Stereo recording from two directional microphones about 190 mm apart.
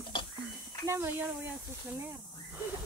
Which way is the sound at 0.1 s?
25° left (ahead or behind).